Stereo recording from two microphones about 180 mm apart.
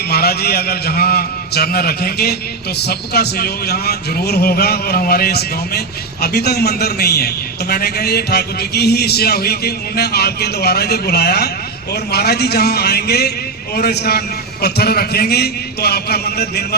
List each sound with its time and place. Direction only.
0.1 s a man's voice: 60° left (ahead or behind)